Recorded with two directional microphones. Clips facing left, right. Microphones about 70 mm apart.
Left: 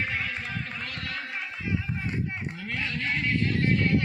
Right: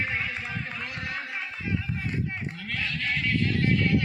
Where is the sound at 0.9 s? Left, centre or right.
Centre.